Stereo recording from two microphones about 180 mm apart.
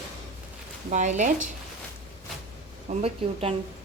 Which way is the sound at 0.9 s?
40° right (ahead or behind).